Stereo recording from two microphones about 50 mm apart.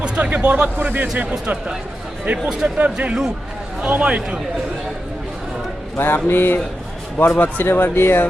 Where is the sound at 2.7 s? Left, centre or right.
Right.